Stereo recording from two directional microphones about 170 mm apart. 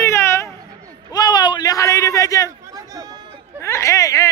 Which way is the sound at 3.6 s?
15° left (ahead or behind).